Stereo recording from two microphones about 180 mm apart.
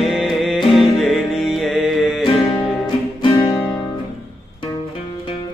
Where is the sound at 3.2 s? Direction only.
25° left (ahead or behind).